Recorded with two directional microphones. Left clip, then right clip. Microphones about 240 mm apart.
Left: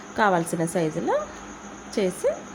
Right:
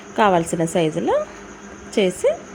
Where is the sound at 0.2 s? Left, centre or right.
Centre.